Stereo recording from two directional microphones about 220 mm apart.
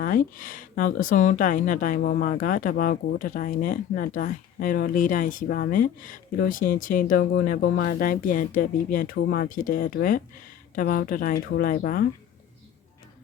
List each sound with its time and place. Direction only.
0.0 s speech: 40° left (ahead or behind)